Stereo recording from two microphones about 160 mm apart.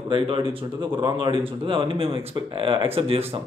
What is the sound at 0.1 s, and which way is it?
Speech, 35° right (ahead or behind).